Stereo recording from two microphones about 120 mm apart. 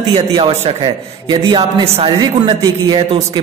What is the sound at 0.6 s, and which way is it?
Speech, 60° right (ahead or behind).